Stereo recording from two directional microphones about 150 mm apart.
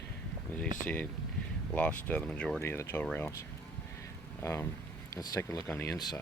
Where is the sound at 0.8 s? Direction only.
10° left (ahead or behind).